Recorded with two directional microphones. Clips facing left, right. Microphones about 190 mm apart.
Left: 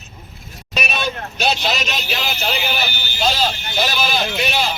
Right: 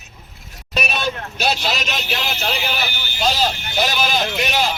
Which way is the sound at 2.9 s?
50° right (ahead or behind).